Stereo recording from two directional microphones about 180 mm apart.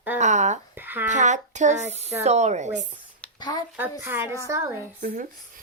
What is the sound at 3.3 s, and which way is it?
Speech, 25° left (ahead or behind).